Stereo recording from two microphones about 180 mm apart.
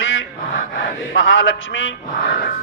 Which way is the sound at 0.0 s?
90° left.